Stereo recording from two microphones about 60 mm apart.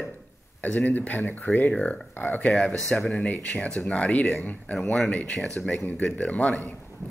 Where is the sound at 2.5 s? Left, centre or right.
Centre.